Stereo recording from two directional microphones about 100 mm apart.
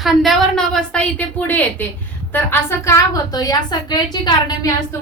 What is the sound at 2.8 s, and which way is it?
A woman's voice, 35° left (ahead or behind).